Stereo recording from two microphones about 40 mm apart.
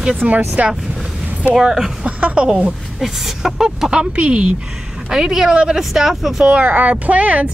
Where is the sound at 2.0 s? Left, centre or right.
Right.